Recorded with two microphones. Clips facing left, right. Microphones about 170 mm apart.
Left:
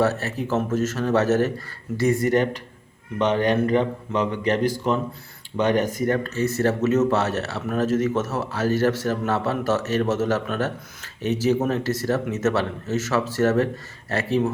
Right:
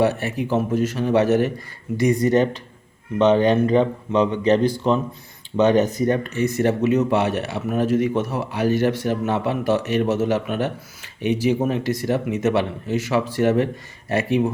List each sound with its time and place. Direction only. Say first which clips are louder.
0.0 s a man's voice: right 2 dB; 15° right (ahead or behind)